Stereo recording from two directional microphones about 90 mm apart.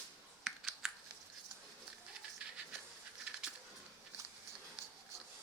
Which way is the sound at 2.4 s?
10° right (ahead or behind).